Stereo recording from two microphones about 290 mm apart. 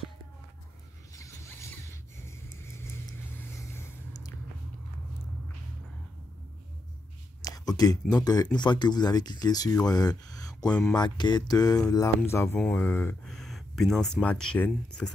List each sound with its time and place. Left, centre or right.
1.1 s zipper: centre
7.4 s speech: centre